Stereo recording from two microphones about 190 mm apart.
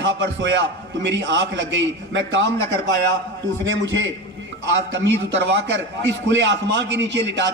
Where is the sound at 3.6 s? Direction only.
90° right.